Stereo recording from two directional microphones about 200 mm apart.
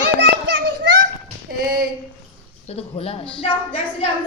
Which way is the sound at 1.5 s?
50° right (ahead or behind).